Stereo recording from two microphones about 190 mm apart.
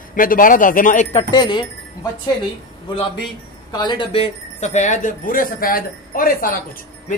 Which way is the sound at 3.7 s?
25° left (ahead or behind).